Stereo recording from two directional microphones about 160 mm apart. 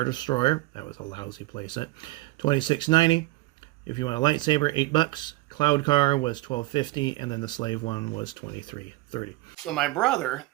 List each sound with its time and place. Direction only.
0.0 s speech: 25° left (ahead or behind)
9.6 s speech: centre (ahead or behind)